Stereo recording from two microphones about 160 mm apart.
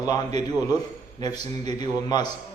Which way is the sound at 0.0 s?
25° left (ahead or behind).